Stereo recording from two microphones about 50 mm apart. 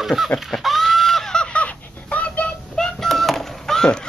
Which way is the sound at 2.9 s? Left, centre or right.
Centre.